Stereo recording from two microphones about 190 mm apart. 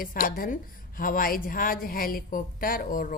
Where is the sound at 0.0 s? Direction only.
50° left (ahead or behind).